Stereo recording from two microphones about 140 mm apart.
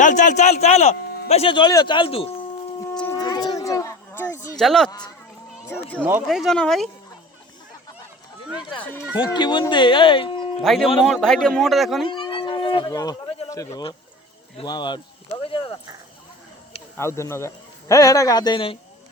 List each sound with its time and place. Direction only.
0.0 s a man's voice: 65° left (ahead or behind); by 2.3 s 45° left (ahead or behind)
3.2 s a sound: 30° left (ahead or behind)
4.5 s speech: 5° left (ahead or behind)
4.9 s speech: 30° left (ahead or behind)
5.6 s speech: 15° left (ahead or behind)
6.0 s speech: 15° right (ahead or behind)
6.2 s a man's voice: centre (ahead or behind)
8.8 s speech: 15° left (ahead or behind)
9.1 s speech: 35° left (ahead or behind)
10.6 s a man's voice: centre (ahead or behind)
12.0 s a sound: 35° left (ahead or behind)
14.6 s speech: 35° left (ahead or behind)
15.4 s a sound: 40° left (ahead or behind)
17.0 s a man's voice: 20° left (ahead or behind); by 18.8 s 35° left (ahead or behind)